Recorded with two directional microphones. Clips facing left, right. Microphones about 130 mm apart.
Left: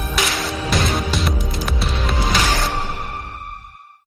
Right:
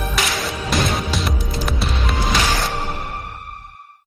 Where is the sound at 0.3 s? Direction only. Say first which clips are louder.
Left 1 dB; centre (ahead or behind).